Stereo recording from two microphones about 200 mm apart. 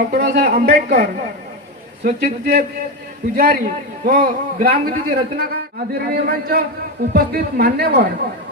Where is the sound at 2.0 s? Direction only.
45° right (ahead or behind).